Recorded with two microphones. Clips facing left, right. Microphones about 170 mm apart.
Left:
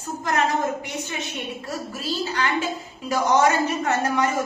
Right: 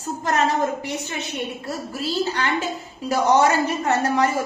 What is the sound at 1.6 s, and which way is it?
A woman's voice, 40° right (ahead or behind).